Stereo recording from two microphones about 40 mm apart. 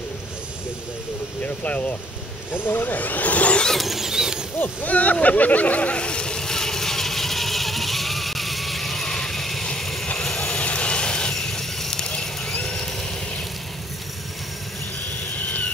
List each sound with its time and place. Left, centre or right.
1.4 s speech: left
2.5 s speech: left
3.0 s speech: left
3.7 s vehicle: centre
4.6 s speech: left
5.2 s vehicle: left; by 9.0 s centre
9.0 s vehicle: centre
10.4 s vehicle: left
11.3 s vehicle: centre
12.0 s a sound: left
12.6 s vehicle: centre
15.0 s a sound: left